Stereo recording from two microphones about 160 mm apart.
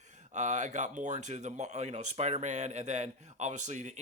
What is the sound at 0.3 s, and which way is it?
Speech, 50° right (ahead or behind).